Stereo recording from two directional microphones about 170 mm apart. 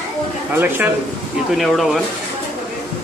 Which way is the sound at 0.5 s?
10° right (ahead or behind).